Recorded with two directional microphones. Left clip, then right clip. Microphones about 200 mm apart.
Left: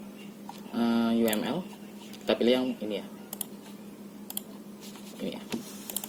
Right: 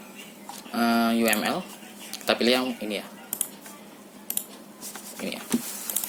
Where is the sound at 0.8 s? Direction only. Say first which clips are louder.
Right 4 dB; 50° right (ahead or behind).